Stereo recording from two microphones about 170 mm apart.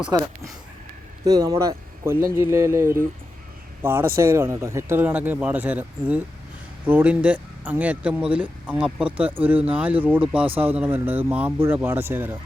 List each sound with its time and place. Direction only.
0.1 s speech: 20° right (ahead or behind)